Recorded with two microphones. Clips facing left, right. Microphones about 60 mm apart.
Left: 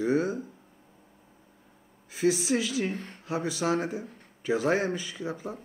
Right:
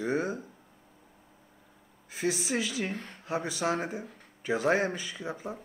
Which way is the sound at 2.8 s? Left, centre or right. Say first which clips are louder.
Left 3 dB; centre.